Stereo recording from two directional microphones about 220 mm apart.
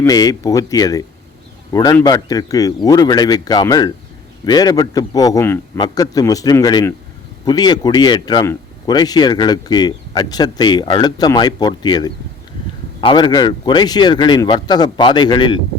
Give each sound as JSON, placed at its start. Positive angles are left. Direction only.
{"t": 0.0, "sound": "a man's voice", "side_deg": 15}